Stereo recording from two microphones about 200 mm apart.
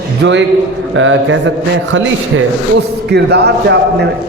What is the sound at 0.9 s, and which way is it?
Mantra, 70° right (ahead or behind).